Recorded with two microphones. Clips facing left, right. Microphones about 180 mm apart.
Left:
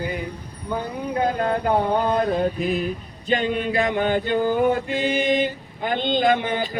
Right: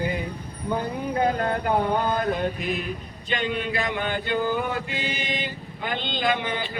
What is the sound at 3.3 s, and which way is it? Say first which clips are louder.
Male singing: left 5 dB; 40° left (ahead or behind).